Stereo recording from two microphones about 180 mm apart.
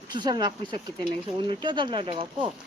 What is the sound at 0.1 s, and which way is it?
Speech, 25° right (ahead or behind).